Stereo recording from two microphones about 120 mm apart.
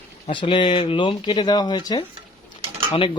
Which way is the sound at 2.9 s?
50° left (ahead or behind).